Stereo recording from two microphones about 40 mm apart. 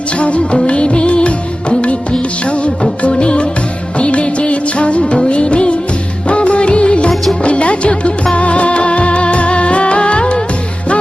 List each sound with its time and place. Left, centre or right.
0.2 s music of bollywood: left
2.4 s music of bollywood: left
3.0 s music: left
3.9 s music of bollywood: left
6.2 s music: left